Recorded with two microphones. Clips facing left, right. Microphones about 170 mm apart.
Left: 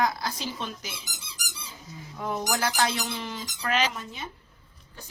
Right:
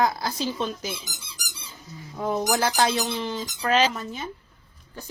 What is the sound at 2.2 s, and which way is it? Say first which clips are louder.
Speech: right 5 dB; 30° right (ahead or behind).